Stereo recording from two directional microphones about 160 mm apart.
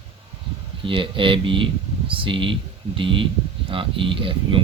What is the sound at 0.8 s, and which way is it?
Speech, 30° right (ahead or behind).